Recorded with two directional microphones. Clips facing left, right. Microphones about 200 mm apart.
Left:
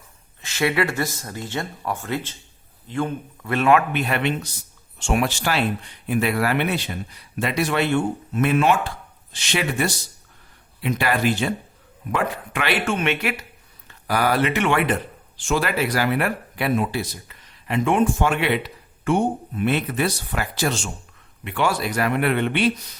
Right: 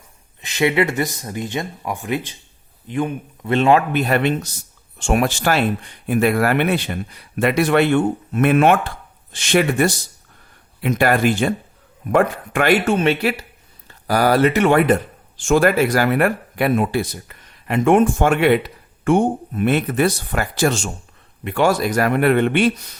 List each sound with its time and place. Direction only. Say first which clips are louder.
0.4 s speech: right 4 dB; 20° right (ahead or behind)
3.5 s speech: right 3 dB; 30° right (ahead or behind); by 22.7 s 50° right (ahead or behind)